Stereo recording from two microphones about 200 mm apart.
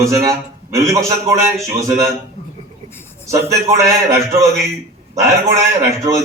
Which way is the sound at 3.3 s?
15° right (ahead or behind).